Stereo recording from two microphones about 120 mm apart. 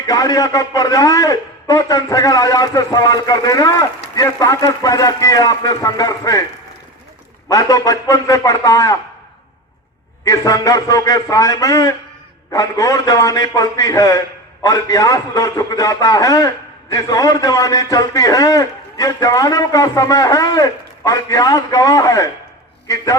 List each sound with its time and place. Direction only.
0.1 s a man's voice: 30° left (ahead or behind)
7.5 s a man's voice: 30° left (ahead or behind)
10.2 s a man's voice: 30° left (ahead or behind)